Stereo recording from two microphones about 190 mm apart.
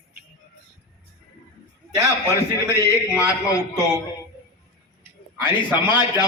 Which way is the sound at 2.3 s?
15° left (ahead or behind).